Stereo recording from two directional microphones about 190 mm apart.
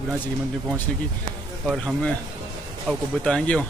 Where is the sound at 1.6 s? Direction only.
5° left (ahead or behind).